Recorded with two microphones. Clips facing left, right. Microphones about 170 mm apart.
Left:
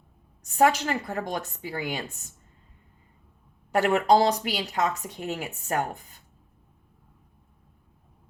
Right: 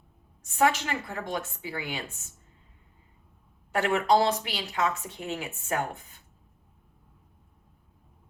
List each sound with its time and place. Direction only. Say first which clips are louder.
0.4 s a woman's voice: left 3 dB; 40° left (ahead or behind)
3.7 s a woman's voice: left 3 dB; 40° left (ahead or behind)